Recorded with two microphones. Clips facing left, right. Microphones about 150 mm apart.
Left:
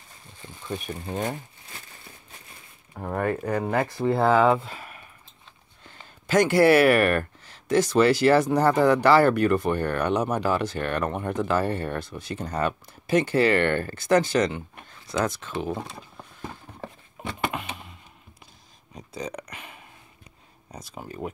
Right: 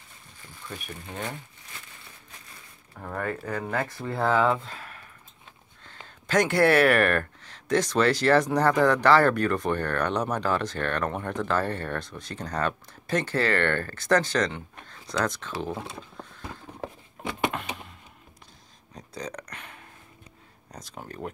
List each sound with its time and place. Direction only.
0.7 s speech: 30° left (ahead or behind)
2.9 s speech: 25° left (ahead or behind); by 15.5 s 10° left (ahead or behind)
15.6 s a sound: 10° left (ahead or behind)
17.2 s power windows: 5° left (ahead or behind)
18.9 s a sound: 5° left (ahead or behind)
20.7 s speech: 5° left (ahead or behind)